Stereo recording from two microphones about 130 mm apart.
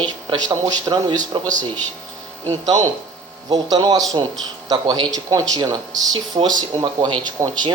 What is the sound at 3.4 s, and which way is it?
Speech, 30° right (ahead or behind).